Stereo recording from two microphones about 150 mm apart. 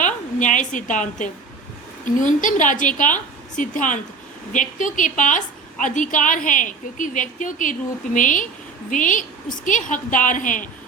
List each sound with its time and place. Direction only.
0.0 s a woman's voice: 55° left (ahead or behind)